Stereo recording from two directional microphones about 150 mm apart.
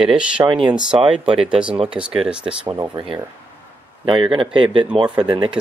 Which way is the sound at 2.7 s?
30° right (ahead or behind).